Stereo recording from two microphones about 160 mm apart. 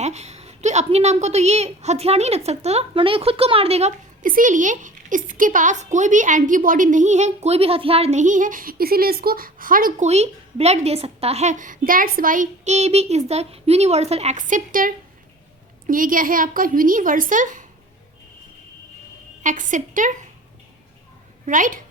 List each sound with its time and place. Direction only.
0.0 s a woman's voice: 45° right (ahead or behind)
4.2 s a woman's voice: 55° right (ahead or behind)
10.1 s a woman's voice: 40° right (ahead or behind)
19.4 s a woman's voice: 55° right (ahead or behind)
21.4 s a woman's voice: 55° right (ahead or behind)